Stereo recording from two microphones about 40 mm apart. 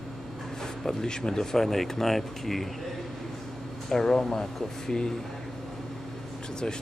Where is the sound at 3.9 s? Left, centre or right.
Centre.